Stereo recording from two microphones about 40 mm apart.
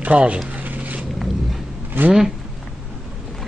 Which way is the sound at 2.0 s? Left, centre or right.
Right.